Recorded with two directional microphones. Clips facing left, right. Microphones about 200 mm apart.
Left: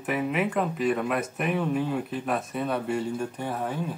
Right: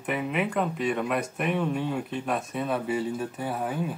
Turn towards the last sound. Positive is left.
turn(degrees=-5)  # may be behind; listen again after turning